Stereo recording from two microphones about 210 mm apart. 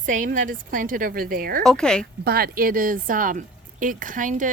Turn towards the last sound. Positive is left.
turn(degrees=-40)  # may be behind; listen again after turning